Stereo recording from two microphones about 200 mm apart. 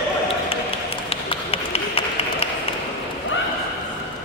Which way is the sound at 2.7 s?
30° left (ahead or behind).